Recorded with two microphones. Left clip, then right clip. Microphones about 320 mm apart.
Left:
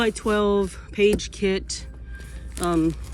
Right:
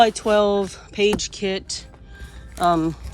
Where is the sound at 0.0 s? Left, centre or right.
Centre.